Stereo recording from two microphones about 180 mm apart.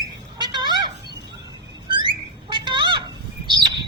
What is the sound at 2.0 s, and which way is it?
Bird, 25° right (ahead or behind).